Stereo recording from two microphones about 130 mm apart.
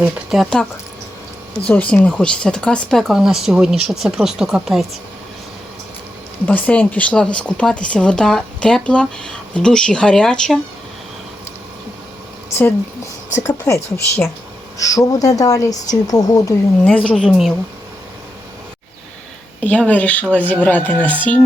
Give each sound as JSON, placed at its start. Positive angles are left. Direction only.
{"t": 0.0, "sound": "speech", "side_deg": 0}
{"t": 1.6, "sound": "speech", "side_deg": 10}
{"t": 6.4, "sound": "speech", "side_deg": 15}
{"t": 13.5, "sound": "speech", "side_deg": 20}
{"t": 15.7, "sound": "speech", "side_deg": 70}
{"t": 16.0, "sound": "speech", "side_deg": 30}
{"t": 16.8, "sound": "speech", "side_deg": 10}
{"t": 19.6, "sound": "speech", "side_deg": 10}